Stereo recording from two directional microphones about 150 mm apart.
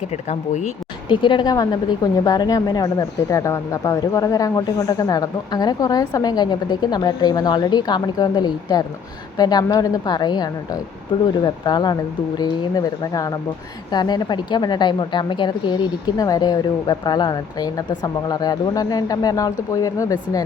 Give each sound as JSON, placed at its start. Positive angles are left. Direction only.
{"t": 0.3, "sound": "speech", "side_deg": 50}
{"t": 1.0, "sound": "a woman's voice", "side_deg": 30}